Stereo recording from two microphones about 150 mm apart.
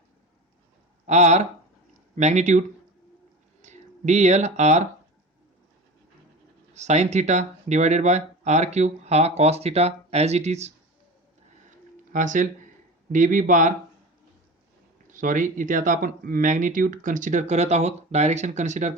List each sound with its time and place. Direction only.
1.0 s speech: 50° right (ahead or behind)
6.7 s speech: 50° right (ahead or behind)
12.1 s speech: 60° right (ahead or behind)
15.0 s speech: 60° right (ahead or behind)